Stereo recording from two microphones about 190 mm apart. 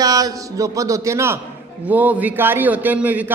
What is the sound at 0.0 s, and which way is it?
A man's voice, 20° right (ahead or behind).